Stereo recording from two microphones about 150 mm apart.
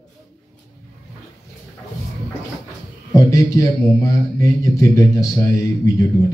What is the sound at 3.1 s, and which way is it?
A man's voice, 25° left (ahead or behind).